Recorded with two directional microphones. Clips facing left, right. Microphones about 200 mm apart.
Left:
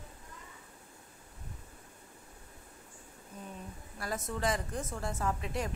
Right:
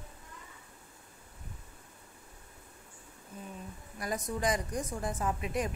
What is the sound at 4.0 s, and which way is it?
A woman's voice, 15° right (ahead or behind).